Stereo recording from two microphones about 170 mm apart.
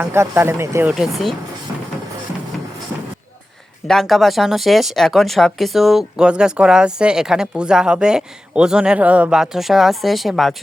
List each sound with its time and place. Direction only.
0.0 s speech: 15° right (ahead or behind)
3.8 s speech: centre (ahead or behind)